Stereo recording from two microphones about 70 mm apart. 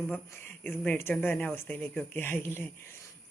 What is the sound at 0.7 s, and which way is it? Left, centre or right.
Speech, left.